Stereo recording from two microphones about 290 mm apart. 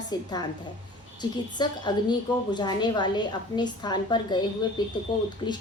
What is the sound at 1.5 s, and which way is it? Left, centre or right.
A woman's voice, centre.